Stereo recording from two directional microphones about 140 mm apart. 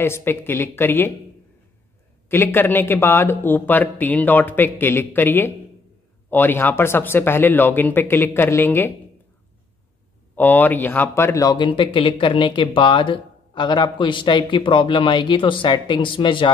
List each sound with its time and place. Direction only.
0.0 s speech: 15° left (ahead or behind)
2.2 s speech: 15° left (ahead or behind)
10.3 s speech: 10° left (ahead or behind); by 16.5 s 35° left (ahead or behind)